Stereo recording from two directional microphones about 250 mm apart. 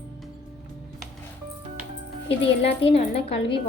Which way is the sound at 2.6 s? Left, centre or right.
Left.